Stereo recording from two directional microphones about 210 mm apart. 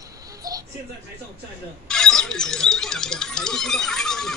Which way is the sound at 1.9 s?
5° left (ahead or behind).